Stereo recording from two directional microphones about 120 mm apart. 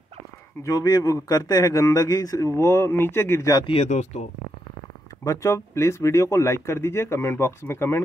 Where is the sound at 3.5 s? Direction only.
45° left (ahead or behind).